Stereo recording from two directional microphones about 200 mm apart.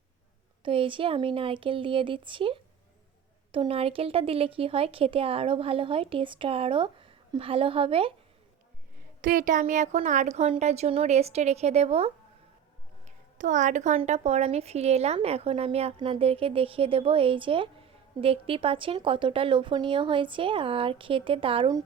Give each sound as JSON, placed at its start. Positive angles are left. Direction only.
{"t": 0.6, "sound": "a woman's voice", "side_deg": -25}
{"t": 9.2, "sound": "a woman's voice", "side_deg": -40}